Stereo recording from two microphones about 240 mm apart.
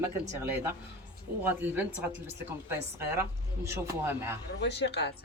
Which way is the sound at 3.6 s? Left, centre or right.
Centre.